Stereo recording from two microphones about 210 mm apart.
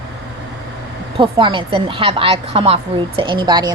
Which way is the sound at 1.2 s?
25° right (ahead or behind).